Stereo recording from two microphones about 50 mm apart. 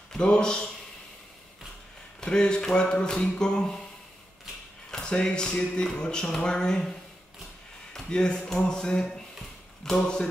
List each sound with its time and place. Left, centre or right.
0.1 s speech: centre
2.1 s speech: centre
4.9 s speech: centre
7.9 s speech: centre